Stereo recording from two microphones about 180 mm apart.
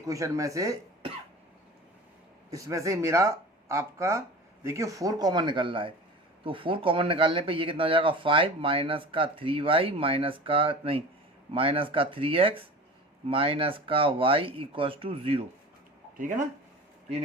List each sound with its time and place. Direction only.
0.0 s speech: 15° right (ahead or behind)
2.5 s speech: 20° right (ahead or behind)
16.1 s speech: 45° right (ahead or behind)